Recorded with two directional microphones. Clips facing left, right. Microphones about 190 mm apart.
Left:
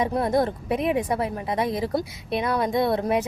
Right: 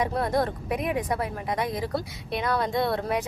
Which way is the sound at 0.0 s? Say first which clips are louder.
Left 3 dB; 20° left (ahead or behind).